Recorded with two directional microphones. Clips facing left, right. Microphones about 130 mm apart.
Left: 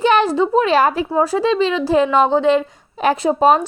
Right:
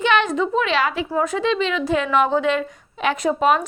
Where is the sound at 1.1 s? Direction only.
30° left (ahead or behind).